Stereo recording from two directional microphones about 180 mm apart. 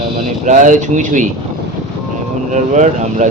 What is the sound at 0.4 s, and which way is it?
Speech, 45° right (ahead or behind).